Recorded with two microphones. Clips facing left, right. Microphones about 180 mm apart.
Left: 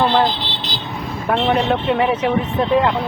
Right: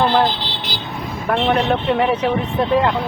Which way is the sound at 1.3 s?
Centre (ahead or behind).